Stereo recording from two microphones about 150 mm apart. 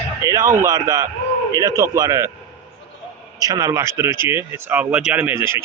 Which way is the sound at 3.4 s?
25° right (ahead or behind).